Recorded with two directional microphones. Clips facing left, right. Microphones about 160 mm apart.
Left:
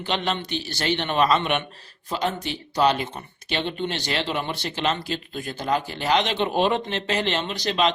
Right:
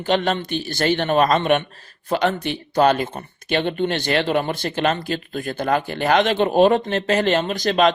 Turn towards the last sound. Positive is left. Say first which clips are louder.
# right 5 dB
turn(degrees=-50)  # may be behind; listen again after turning